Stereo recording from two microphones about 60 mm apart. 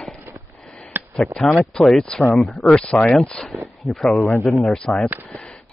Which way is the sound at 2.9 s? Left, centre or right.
Left.